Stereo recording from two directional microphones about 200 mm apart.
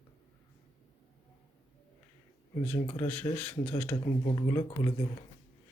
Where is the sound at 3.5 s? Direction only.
30° left (ahead or behind).